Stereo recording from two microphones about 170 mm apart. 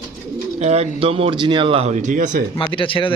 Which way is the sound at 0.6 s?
40° right (ahead or behind).